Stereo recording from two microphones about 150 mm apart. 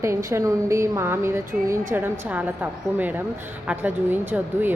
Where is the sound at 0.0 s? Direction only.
20° right (ahead or behind).